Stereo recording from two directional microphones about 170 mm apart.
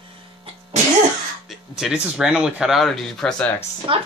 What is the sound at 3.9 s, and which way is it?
Speech, 30° right (ahead or behind).